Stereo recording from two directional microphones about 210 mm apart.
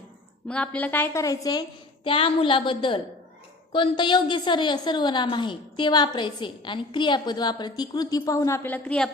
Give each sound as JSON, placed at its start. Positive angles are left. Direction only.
{"t": 0.4, "sound": "a woman's voice", "side_deg": 5}